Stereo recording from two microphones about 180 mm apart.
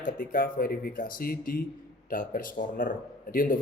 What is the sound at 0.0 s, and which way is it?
A man's voice, 50° left (ahead or behind).